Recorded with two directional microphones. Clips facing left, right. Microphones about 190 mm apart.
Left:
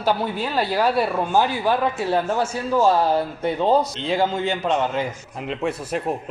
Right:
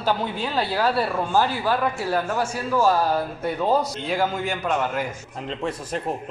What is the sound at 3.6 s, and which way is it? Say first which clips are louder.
A man's voice: left 3 dB; 25° left (ahead or behind).